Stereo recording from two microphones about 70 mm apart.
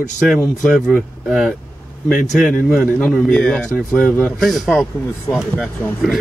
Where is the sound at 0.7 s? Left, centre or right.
Centre.